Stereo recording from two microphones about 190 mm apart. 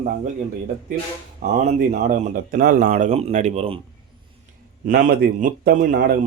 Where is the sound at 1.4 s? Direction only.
40° right (ahead or behind).